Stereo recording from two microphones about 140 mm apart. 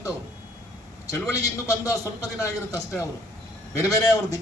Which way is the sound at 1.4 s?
25° left (ahead or behind).